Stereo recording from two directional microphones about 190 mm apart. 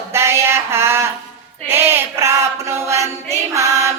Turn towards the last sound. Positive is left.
turn(degrees=-15)  # may be behind; listen again after turning